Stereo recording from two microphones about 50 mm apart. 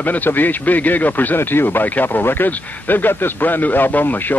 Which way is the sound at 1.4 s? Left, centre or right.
Left.